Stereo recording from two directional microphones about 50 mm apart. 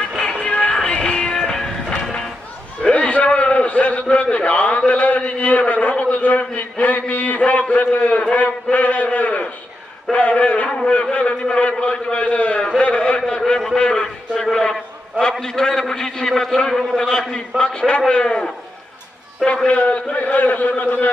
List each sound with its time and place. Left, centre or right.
0.2 s music: centre
2.8 s a sound: left
8.7 s a man's voice: left
14.0 s a man's voice: centre; by 21.1 s left